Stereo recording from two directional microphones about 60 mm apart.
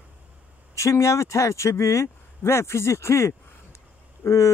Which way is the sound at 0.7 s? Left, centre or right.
Left.